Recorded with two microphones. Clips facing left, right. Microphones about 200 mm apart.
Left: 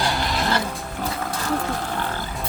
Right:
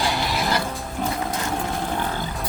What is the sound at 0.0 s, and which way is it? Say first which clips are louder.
Music: even; 5° right (ahead or behind).